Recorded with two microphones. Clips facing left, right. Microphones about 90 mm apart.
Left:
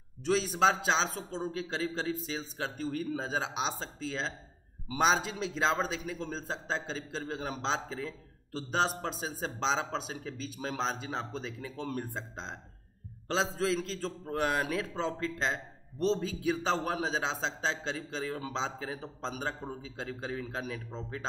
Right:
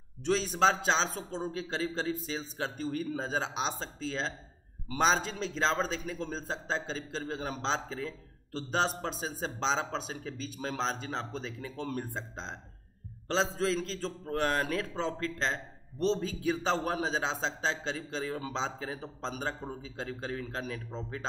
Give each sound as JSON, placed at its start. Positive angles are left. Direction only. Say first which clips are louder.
{"t": 0.2, "sound": "a man's voice", "louder": "even", "side_deg": 5}